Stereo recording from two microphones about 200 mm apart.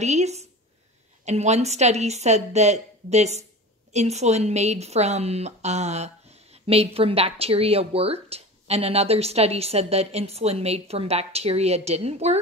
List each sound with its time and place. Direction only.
0.0 s a woman's voice: 35° right (ahead or behind)